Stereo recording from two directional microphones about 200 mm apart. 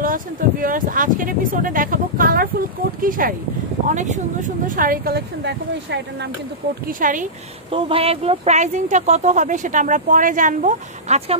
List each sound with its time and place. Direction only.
0.0 s speech: 45° right (ahead or behind); by 5.9 s 60° right (ahead or behind)
6.9 s speech: 40° right (ahead or behind)
7.7 s speech: 30° right (ahead or behind)